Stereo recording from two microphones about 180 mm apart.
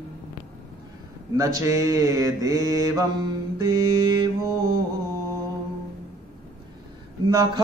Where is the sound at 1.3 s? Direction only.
20° right (ahead or behind).